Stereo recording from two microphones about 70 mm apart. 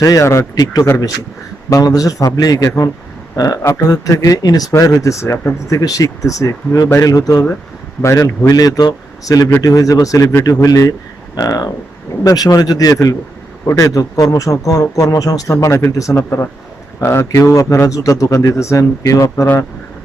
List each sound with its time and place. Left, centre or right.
0.0 s a man's voice: left
0.5 s speech: left
1.7 s a man's voice: left
8.0 s a man's voice: left
8.5 s a man's voice: left
15.6 s a man's voice: left
17.0 s a man's voice: left